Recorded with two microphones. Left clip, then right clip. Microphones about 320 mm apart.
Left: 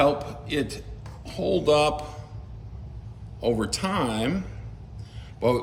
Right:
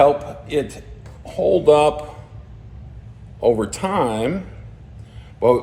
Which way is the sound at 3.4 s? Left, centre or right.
Centre.